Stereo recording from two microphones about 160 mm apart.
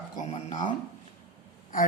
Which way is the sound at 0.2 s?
50° left (ahead or behind).